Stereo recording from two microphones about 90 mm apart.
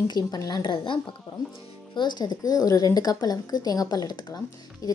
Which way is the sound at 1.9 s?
55° left (ahead or behind).